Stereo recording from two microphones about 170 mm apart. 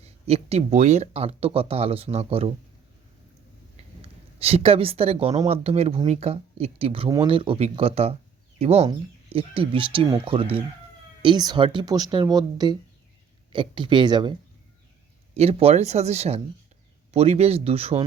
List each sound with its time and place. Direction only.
0.0 s speech: 35° right (ahead or behind)
4.0 s speech: 35° right (ahead or behind)
15.4 s speech: 35° right (ahead or behind)